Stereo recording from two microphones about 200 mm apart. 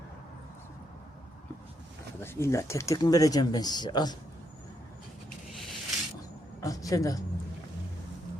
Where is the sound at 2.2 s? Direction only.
10° left (ahead or behind).